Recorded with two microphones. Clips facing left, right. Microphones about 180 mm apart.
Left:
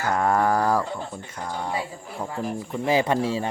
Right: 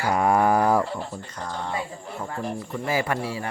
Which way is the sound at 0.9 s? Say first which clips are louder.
Even; 10° left (ahead or behind).